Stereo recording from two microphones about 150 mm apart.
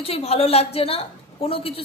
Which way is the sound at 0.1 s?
40° left (ahead or behind).